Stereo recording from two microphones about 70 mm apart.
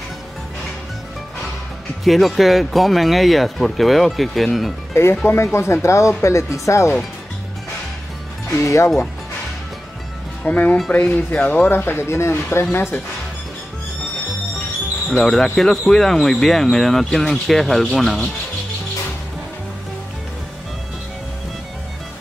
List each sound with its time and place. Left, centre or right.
2.0 s speech: centre
5.2 s speech: left
8.5 s speech: left
10.4 s speech: centre; by 12.6 s left
15.0 s speech: centre